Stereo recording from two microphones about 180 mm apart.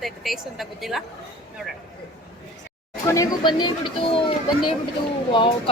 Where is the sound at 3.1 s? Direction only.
20° left (ahead or behind).